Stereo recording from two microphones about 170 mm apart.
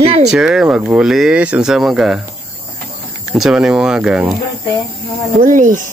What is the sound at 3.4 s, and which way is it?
Speech, 5° right (ahead or behind).